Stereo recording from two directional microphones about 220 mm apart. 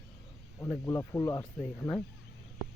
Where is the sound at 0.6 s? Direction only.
15° left (ahead or behind).